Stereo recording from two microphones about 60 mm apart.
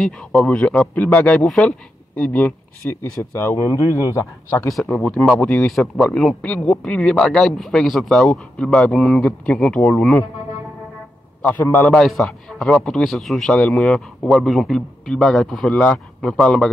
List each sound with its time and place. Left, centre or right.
0.0 s a man's voice: centre
2.8 s a man's voice: left
3.3 s speech: left
4.8 s a man's voice: left; by 8.2 s centre
8.2 s speech: centre
11.4 s a man's voice: left
11.9 s a man's voice: centre
13.5 s a man's voice: centre